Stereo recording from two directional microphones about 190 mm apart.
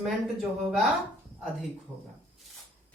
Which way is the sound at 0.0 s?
Centre (ahead or behind).